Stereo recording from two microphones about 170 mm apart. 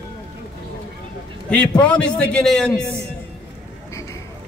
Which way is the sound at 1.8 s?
5° left (ahead or behind).